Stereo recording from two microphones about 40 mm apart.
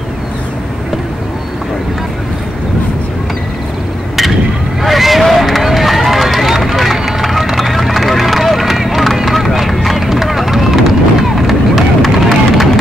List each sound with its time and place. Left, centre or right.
4.8 s run: centre